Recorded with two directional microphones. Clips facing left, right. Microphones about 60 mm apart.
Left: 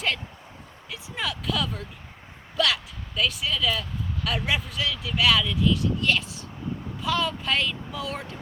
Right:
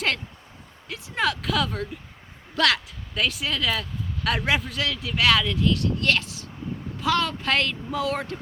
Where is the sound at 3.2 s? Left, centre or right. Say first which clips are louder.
Even; right.